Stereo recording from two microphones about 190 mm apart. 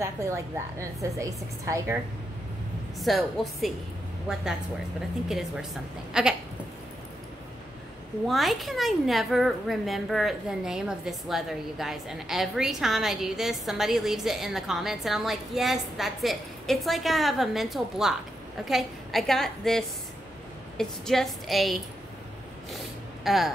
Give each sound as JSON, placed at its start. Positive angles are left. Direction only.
{"t": 0.0, "sound": "a woman's voice", "side_deg": -15}
{"t": 3.0, "sound": "a woman's voice", "side_deg": 0}
{"t": 6.2, "sound": "a woman's voice", "side_deg": -5}
{"t": 8.3, "sound": "a woman's voice", "side_deg": 0}
{"t": 23.2, "sound": "speech", "side_deg": 0}